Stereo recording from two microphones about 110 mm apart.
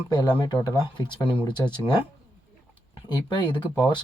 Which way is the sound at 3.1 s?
45° left (ahead or behind).